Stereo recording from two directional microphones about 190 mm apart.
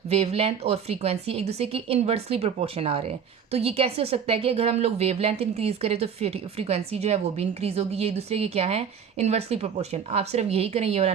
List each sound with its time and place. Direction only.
0.1 s speech: 30° right (ahead or behind)